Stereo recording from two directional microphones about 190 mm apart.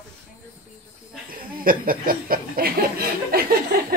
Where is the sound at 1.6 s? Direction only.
50° right (ahead or behind).